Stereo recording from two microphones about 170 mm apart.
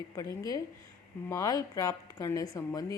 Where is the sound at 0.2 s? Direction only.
20° left (ahead or behind).